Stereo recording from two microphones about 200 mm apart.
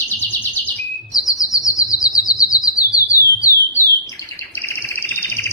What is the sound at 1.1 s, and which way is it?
Bird flight, 15° left (ahead or behind).